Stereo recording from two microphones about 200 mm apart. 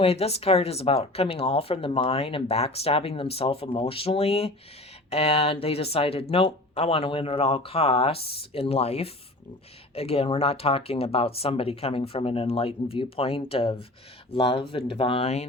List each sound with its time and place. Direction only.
0.0 s speech: 30° left (ahead or behind)